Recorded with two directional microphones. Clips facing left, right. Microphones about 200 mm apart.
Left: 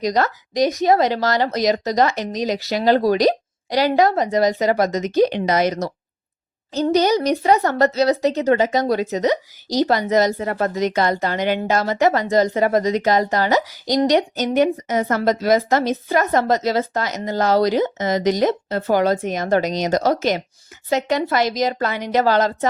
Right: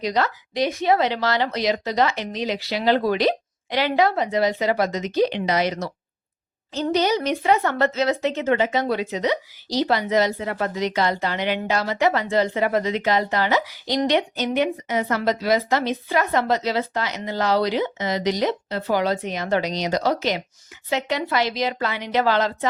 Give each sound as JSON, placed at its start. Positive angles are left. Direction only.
{"t": 0.0, "sound": "speech", "side_deg": 45}
{"t": 6.9, "sound": "speech", "side_deg": 40}